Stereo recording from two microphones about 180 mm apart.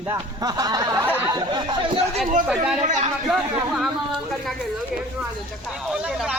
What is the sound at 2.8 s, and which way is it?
Speech, 45° right (ahead or behind).